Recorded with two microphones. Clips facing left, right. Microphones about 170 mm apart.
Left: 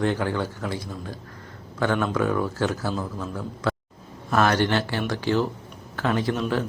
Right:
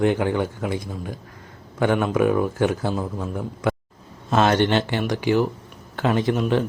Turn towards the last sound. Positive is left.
turn(degrees=-20)  # may be behind; listen again after turning